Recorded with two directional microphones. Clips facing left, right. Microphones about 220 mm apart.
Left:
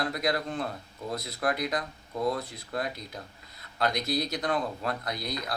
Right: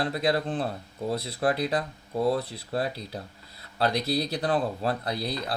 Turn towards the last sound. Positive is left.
turn(degrees=-30)  # may be behind; listen again after turning